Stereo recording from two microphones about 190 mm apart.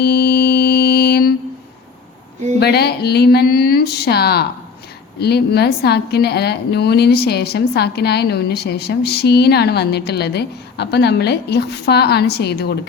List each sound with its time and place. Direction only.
0.0 s mantra: 55° left (ahead or behind)
2.6 s a woman's voice: 60° left (ahead or behind)